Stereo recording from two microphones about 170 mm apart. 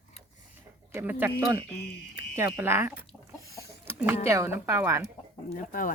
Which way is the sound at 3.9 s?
15° right (ahead or behind).